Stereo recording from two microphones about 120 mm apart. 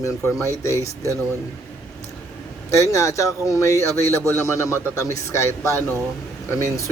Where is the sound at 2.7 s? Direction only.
25° left (ahead or behind).